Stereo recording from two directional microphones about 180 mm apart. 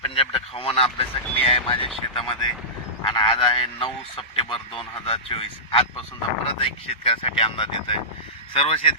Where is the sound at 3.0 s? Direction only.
25° left (ahead or behind).